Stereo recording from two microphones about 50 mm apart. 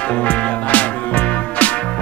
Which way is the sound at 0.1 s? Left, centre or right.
Left.